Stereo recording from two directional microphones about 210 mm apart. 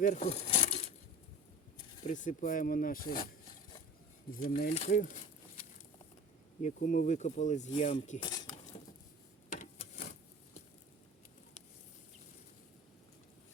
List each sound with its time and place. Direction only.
0.0 s a sound: 35° left (ahead or behind)
2.0 s speech: 35° left (ahead or behind)
4.3 s speech: 40° left (ahead or behind)
6.6 s speech: 35° left (ahead or behind)
7.7 s speech: 25° left (ahead or behind)
8.2 s cutlery: 20° left (ahead or behind)
9.6 s a sound: 35° left (ahead or behind)